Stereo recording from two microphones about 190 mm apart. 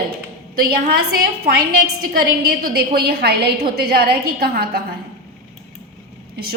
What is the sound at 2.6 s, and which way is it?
A woman's voice, 50° right (ahead or behind).